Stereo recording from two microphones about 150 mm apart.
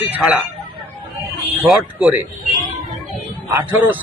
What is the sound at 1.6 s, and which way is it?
Speech, 5° right (ahead or behind).